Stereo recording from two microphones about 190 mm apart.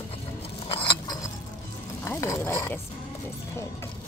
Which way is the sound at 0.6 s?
25° left (ahead or behind).